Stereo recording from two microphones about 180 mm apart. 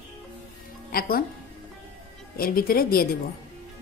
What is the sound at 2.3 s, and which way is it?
Speech, 55° left (ahead or behind).